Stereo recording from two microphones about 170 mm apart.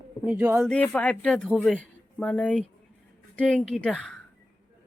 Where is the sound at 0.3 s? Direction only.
10° right (ahead or behind).